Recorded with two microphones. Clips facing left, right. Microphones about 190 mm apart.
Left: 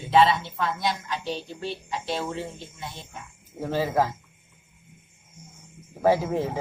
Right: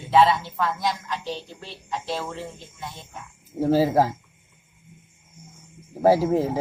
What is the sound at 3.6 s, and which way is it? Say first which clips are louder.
Speech: right 5 dB; 35° right (ahead or behind).